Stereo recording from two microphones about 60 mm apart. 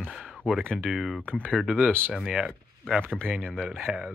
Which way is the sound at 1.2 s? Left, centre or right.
Right.